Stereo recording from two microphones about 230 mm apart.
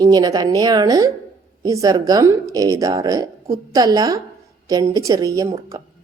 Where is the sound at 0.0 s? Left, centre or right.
Centre.